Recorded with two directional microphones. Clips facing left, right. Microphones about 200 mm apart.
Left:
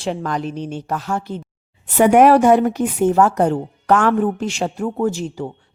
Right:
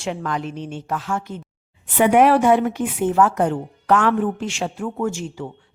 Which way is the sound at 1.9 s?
45° left (ahead or behind).